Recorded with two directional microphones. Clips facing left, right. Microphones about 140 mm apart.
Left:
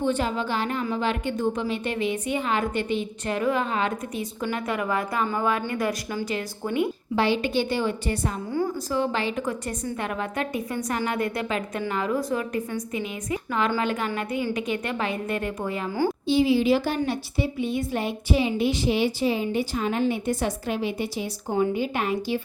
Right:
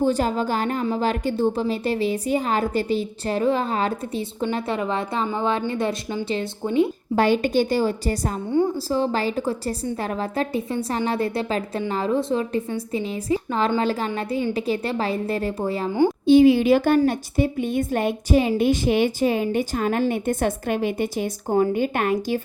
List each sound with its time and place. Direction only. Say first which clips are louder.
0.0 s a woman's voice: right 4 dB; 40° right (ahead or behind)
7.2 s a woman's voice: right 4 dB; 45° right (ahead or behind)
15.9 s a woman's voice: right 6 dB; 20° right (ahead or behind)
16.2 s a woman's voice: right 7 dB; 50° right (ahead or behind)